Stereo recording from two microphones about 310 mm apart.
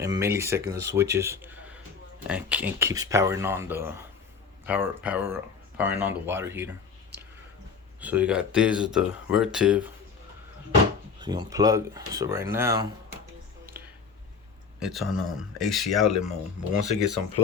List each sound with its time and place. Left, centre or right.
0.0 s speech: centre
7.1 s a sound: right
8.0 s speech: centre
11.2 s speech: centre
13.7 s a sound: centre
14.8 s speech: centre
16.7 s speech: right